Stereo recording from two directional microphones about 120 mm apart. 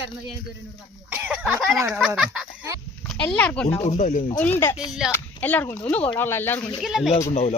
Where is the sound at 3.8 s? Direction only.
80° left.